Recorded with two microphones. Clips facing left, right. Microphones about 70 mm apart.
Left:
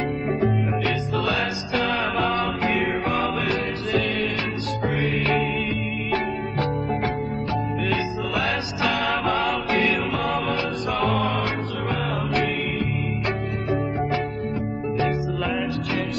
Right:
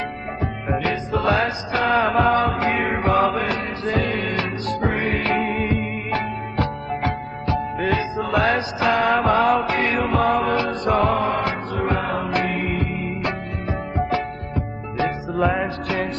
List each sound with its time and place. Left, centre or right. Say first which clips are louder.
0.7 s music: right 2 dB; right
7.8 s music: right 3 dB; right
15.0 s music: right 3 dB; right